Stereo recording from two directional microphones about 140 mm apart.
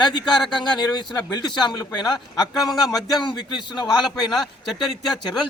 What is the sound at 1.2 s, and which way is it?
Speech, 30° left (ahead or behind).